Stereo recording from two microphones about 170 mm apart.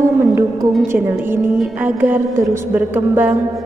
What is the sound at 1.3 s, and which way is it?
Music, 10° right (ahead or behind).